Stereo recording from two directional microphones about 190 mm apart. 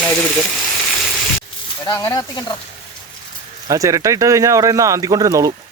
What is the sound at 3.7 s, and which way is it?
Speech, 15° right (ahead or behind).